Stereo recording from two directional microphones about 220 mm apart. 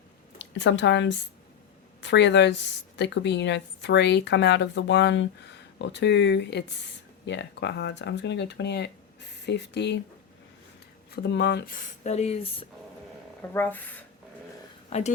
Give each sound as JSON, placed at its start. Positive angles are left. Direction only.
{"t": 0.3, "sound": "a woman's voice", "side_deg": 55}
{"t": 11.1, "sound": "speech", "side_deg": 50}
{"t": 13.5, "sound": "speech", "side_deg": 10}
{"t": 14.8, "sound": "a sound", "side_deg": 30}